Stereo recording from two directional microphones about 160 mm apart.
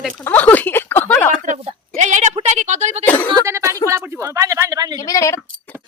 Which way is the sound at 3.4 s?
20° right (ahead or behind).